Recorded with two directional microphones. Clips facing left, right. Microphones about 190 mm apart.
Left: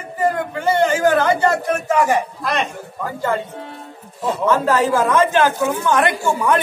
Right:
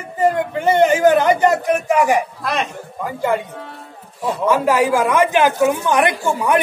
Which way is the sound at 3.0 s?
15° right (ahead or behind).